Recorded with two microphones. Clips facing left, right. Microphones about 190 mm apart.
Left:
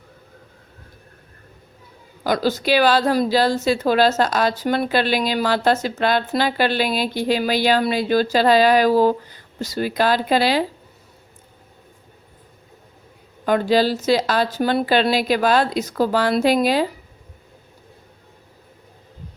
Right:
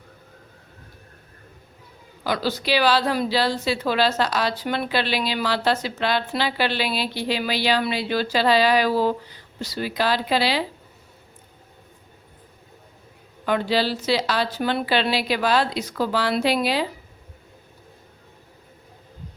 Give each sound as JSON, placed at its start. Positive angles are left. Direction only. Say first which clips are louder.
{"t": 2.2, "sound": "a woman's voice", "louder": "left 5 dB", "side_deg": 45}
{"t": 13.4, "sound": "a woman's voice", "louder": "left 5 dB", "side_deg": 45}